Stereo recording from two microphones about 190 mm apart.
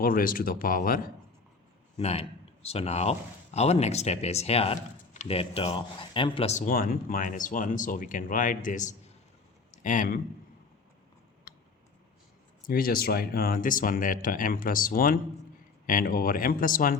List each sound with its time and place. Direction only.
0.0 s speech: 45° left (ahead or behind)
2.0 s a man's voice: 35° left (ahead or behind)
12.6 s speech: 50° left (ahead or behind)